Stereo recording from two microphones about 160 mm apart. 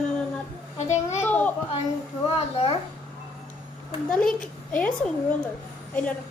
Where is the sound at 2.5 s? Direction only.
35° left (ahead or behind).